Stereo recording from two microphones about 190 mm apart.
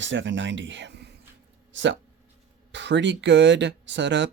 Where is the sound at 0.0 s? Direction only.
75° right (ahead or behind).